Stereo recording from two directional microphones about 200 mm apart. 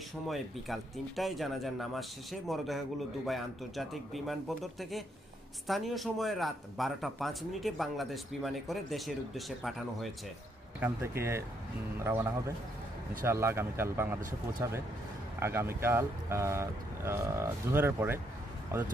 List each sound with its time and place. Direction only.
0.3 s speech: centre (ahead or behind)
10.8 s speech: 10° right (ahead or behind)